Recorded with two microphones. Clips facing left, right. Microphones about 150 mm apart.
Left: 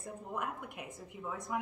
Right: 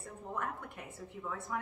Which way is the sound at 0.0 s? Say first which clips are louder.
Even; 15° left (ahead or behind).